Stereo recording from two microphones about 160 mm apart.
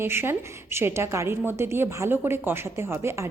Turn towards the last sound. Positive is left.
turn(degrees=-15)  # may be behind; listen again after turning